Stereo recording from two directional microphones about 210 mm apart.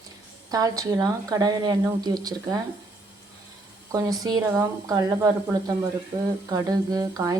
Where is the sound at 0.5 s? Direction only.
15° right (ahead or behind).